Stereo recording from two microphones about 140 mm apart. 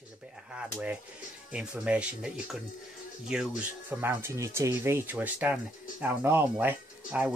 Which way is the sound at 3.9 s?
15° right (ahead or behind).